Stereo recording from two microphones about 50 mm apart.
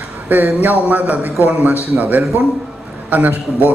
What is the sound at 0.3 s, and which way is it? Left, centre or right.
Speech, right.